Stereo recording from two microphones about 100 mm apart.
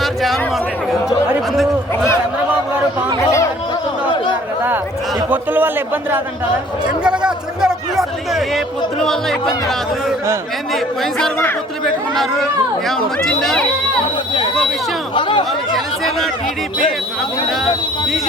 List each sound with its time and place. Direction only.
0.0 s a sound: centre (ahead or behind)
5.3 s a man's voice: 20° right (ahead or behind)
7.0 s a sound: 10° right (ahead or behind)
9.0 s speech: 5° left (ahead or behind)
10.8 s speech: centre (ahead or behind)
13.2 s speech: 5° left (ahead or behind)
15.1 s speech: 55° left (ahead or behind)